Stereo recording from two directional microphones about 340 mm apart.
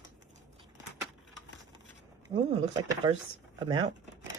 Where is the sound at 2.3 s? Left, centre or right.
Centre.